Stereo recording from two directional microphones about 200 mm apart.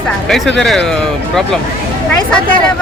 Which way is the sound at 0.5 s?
Centre (ahead or behind).